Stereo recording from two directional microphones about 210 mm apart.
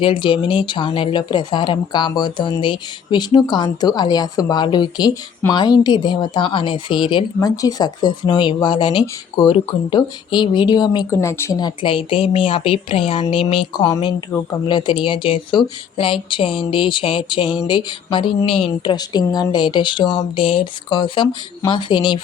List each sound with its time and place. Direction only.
0.0 s speech: 25° left (ahead or behind)
14.7 s speech: 20° left (ahead or behind)